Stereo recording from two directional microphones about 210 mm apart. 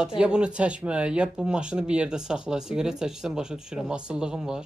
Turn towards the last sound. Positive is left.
turn(degrees=-5)  # may be behind; listen again after turning